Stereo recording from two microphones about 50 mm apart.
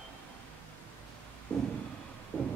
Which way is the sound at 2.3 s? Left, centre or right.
Left.